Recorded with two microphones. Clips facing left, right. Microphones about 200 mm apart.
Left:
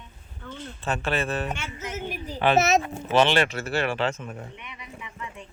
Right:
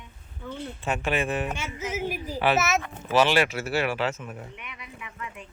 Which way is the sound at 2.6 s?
25° left (ahead or behind).